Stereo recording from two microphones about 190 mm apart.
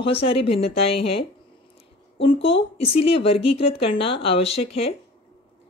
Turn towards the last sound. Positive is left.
turn(degrees=30)  # may be behind; listen again after turning